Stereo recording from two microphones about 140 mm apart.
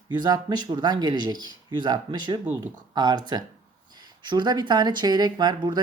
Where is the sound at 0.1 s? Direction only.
30° right (ahead or behind).